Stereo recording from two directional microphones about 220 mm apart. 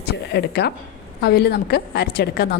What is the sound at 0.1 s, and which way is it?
A woman's voice, 50° left (ahead or behind).